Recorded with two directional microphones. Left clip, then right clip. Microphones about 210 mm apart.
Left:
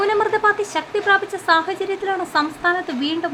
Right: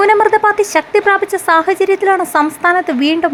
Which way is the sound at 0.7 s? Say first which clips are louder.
Right 6 dB; 30° right (ahead or behind).